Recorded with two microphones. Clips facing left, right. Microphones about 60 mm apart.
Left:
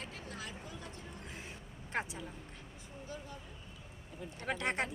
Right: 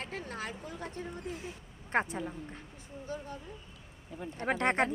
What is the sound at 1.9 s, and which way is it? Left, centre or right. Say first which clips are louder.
Speech: right 8 dB; right.